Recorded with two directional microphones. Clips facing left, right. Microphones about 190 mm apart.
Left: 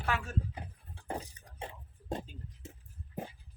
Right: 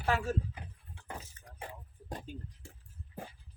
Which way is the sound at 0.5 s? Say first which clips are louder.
Left 3 dB; 35° left (ahead or behind).